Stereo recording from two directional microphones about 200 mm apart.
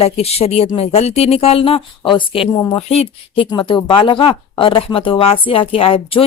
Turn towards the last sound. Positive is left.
turn(degrees=25)  # may be behind; listen again after turning